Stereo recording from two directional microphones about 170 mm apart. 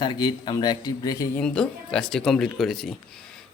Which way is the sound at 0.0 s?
25° left (ahead or behind).